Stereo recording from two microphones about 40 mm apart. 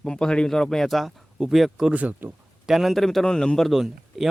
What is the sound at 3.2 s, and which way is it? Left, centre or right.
Speech, centre.